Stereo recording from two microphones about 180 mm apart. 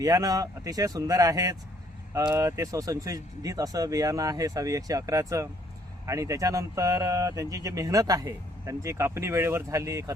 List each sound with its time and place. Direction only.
0.0 s speech: 20° right (ahead or behind)